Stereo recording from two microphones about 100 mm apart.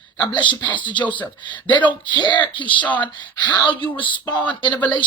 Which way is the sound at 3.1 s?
50° left (ahead or behind).